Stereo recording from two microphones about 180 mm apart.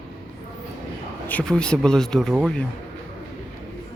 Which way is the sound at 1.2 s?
5° left (ahead or behind).